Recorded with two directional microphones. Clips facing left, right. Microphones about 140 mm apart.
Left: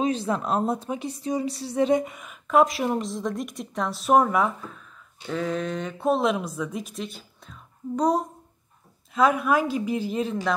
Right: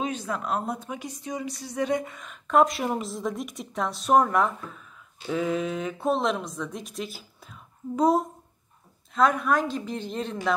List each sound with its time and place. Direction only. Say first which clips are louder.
0.0 s a woman's voice: left 5 dB; 30° left (ahead or behind)
2.1 s a woman's voice: left 1 dB; 5° left (ahead or behind)